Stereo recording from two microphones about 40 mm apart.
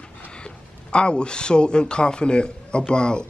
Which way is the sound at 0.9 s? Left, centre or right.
Left.